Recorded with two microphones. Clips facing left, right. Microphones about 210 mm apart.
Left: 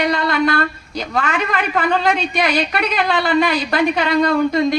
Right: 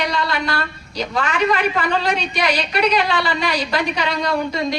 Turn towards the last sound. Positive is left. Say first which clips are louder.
# left 5 dB
turn(degrees=50)  # may be behind; listen again after turning